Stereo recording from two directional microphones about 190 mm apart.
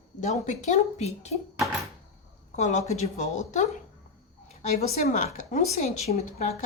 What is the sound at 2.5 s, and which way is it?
A woman's voice, 40° left (ahead or behind).